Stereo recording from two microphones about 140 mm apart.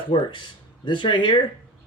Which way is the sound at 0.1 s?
35° left (ahead or behind).